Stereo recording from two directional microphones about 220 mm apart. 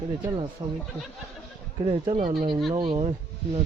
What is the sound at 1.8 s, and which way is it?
Speech, 25° right (ahead or behind).